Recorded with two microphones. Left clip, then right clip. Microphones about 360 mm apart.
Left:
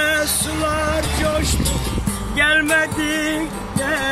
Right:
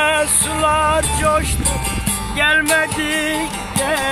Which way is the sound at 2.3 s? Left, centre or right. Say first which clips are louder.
Right 1 dB; centre.